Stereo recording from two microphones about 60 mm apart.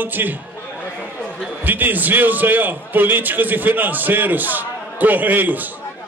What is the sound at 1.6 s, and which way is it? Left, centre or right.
A man's voice, right.